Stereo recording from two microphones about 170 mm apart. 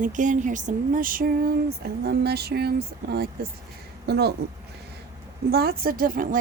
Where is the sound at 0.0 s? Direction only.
50° right (ahead or behind); by 4.4 s 70° right (ahead or behind).